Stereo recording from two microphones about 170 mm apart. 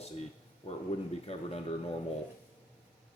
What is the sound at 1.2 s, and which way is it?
Speech, 35° left (ahead or behind).